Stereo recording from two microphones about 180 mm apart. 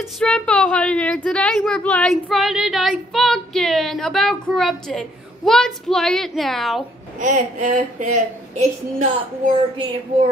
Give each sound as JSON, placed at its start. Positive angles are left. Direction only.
{"t": 0.2, "sound": "a woman's voice", "side_deg": 5}
{"t": 7.2, "sound": "a woman's voice", "side_deg": -45}